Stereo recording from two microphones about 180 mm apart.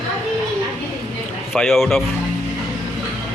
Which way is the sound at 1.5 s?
Centre (ahead or behind).